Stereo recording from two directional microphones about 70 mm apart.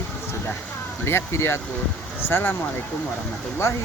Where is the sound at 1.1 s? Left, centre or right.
Left.